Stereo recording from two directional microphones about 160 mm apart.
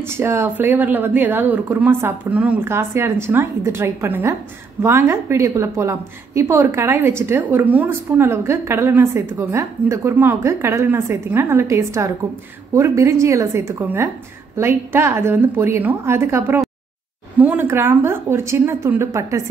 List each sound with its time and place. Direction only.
0.0 s a woman's voice: 15° right (ahead or behind)